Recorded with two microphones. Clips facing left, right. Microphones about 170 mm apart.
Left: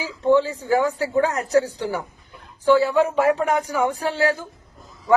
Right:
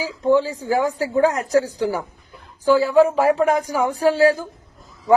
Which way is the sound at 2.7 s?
35° right (ahead or behind).